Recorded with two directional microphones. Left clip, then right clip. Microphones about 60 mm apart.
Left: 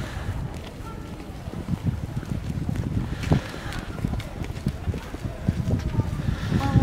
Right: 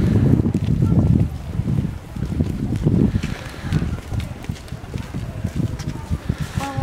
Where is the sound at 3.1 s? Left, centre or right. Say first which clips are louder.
Left 1 dB; centre.